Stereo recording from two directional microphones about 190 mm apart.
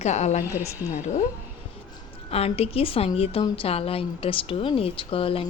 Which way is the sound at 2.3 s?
30° left (ahead or behind).